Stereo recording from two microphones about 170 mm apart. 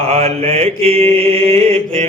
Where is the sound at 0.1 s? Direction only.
40° right (ahead or behind).